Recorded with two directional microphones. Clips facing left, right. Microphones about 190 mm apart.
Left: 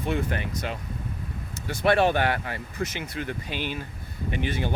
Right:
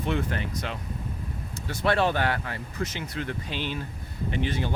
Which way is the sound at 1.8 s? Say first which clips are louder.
Left 3 dB; 15° left (ahead or behind).